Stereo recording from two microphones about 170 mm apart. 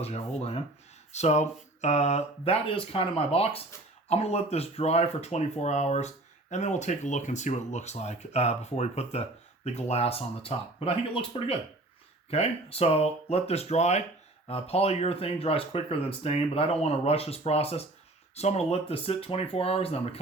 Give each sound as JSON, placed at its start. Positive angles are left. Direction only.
{"t": 0.0, "sound": "speech", "side_deg": 40}